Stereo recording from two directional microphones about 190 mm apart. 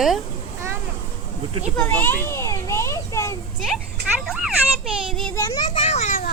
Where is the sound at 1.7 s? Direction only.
10° left (ahead or behind).